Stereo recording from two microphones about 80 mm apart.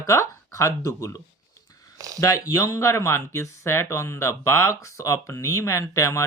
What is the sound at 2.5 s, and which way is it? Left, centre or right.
Speech, left.